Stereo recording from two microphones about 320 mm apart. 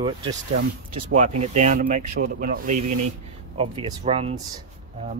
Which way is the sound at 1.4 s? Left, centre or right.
Right.